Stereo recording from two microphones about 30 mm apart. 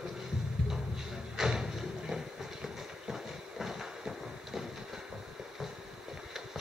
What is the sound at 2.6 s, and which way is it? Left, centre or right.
Clip-clop, centre.